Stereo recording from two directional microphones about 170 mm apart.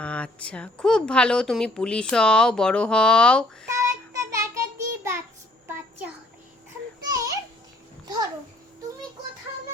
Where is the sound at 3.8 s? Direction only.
20° right (ahead or behind).